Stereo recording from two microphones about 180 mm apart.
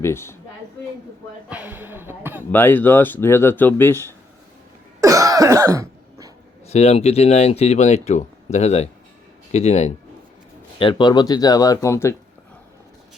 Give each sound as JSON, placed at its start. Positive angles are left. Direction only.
{"t": 0.0, "sound": "speech", "side_deg": 15}
{"t": 1.5, "sound": "a sound", "side_deg": -10}
{"t": 2.5, "sound": "speech", "side_deg": 10}
{"t": 4.9, "sound": "cough", "side_deg": -20}
{"t": 6.7, "sound": "speech", "side_deg": 35}